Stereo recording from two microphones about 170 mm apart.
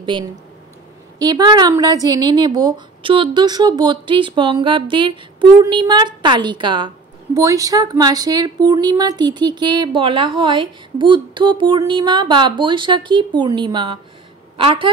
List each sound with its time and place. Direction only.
1.2 s a woman's voice: 25° right (ahead or behind)